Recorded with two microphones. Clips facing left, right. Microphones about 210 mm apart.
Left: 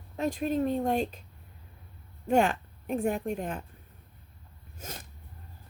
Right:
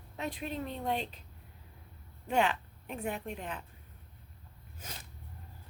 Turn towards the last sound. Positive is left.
turn(degrees=45)  # may be behind; listen again after turning